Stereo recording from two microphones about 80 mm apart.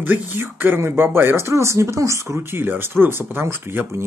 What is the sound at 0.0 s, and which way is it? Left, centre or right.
A man's voice, right.